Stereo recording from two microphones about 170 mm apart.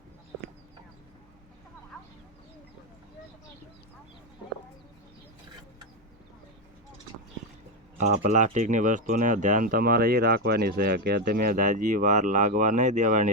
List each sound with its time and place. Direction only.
7.9 s speech: 45° right (ahead or behind)